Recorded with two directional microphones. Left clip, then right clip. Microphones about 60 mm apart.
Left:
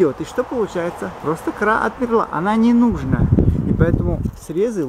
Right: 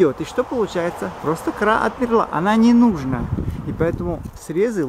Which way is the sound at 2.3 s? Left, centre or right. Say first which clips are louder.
Right 1 dB; right.